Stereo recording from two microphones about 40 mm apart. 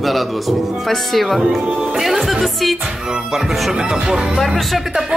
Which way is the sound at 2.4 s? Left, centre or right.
Centre.